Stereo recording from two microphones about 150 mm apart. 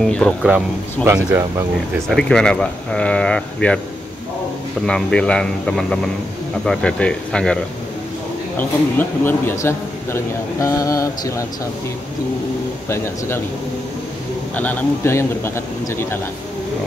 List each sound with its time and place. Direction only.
0.0 s speech: 5° left (ahead or behind)
1.0 s speech: 15° right (ahead or behind)
2.0 s speech: 5° left (ahead or behind)
4.8 s a man's voice: 5° left (ahead or behind)
8.5 s speech: 15° left (ahead or behind)
12.8 s a man's voice: 15° left (ahead or behind)
14.5 s a man's voice: 10° left (ahead or behind)